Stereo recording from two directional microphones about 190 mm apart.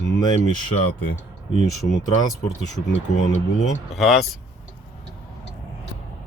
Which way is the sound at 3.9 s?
Centre (ahead or behind).